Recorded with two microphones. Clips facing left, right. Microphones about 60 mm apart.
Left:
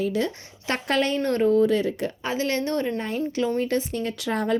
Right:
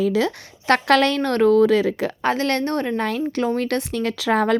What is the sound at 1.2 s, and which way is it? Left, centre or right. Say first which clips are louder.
Speech: right 4 dB; right.